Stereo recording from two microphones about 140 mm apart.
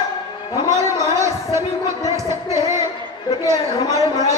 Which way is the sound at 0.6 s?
20° right (ahead or behind).